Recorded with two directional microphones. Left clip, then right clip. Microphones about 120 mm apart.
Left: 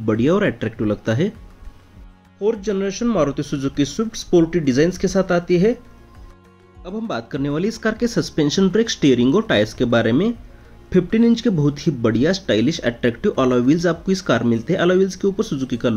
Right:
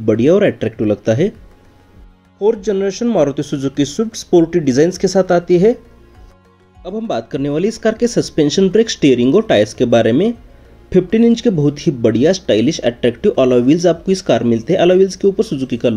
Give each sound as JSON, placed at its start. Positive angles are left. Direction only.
{"t": 0.0, "sound": "speech", "side_deg": -20}
{"t": 2.3, "sound": "speech", "side_deg": -25}
{"t": 6.8, "sound": "speech", "side_deg": -20}